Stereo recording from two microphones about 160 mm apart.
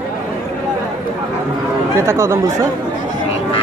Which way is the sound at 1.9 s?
15° right (ahead or behind).